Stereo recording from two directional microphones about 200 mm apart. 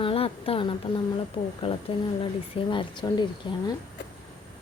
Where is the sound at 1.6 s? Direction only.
30° left (ahead or behind).